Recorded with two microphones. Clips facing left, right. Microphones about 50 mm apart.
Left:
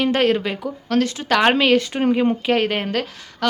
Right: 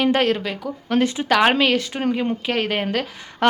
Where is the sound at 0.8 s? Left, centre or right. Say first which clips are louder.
Right 1 dB; centre.